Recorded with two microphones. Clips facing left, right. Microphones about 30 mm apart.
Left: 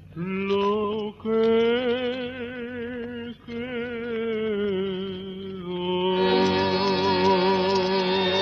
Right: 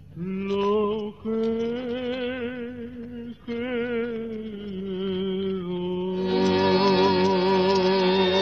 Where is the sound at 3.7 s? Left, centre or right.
Centre.